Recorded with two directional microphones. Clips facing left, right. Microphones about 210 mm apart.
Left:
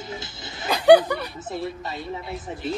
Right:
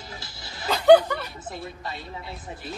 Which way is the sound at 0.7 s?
10° left (ahead or behind).